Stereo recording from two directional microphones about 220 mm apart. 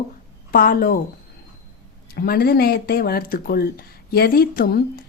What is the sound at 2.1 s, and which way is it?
Speech, 45° left (ahead or behind).